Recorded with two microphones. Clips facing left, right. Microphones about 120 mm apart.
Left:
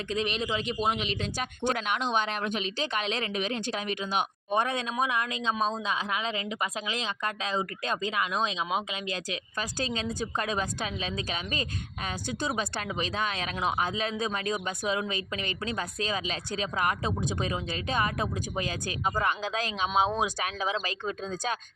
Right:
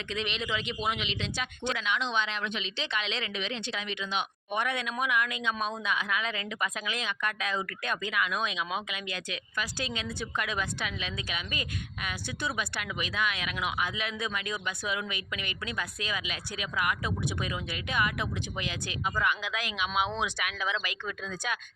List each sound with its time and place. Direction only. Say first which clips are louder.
0.1 s speech: left 3 dB; 40° left (ahead or behind)